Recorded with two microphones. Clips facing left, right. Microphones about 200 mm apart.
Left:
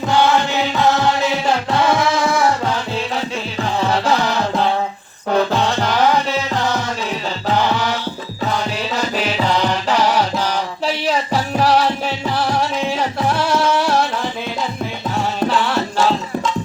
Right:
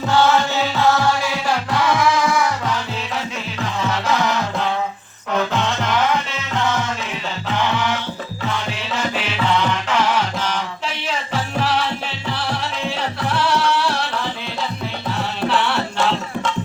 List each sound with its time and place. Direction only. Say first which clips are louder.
0.1 s music: left 1 dB; 15° left (ahead or behind); by 14.1 s 45° left (ahead or behind)
15.4 s music: left 2 dB; 40° left (ahead or behind)